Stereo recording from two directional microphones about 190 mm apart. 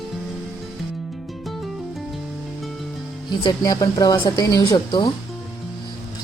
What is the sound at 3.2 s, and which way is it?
A man's voice, 20° left (ahead or behind).